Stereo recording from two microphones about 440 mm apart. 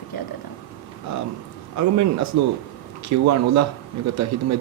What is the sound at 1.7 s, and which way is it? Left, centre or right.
A man's voice, right.